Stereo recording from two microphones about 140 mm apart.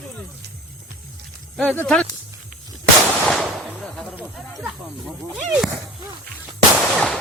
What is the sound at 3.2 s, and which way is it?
Gunshot, centre (ahead or behind).